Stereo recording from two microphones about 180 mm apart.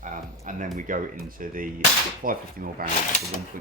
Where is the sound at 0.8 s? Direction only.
50° right (ahead or behind).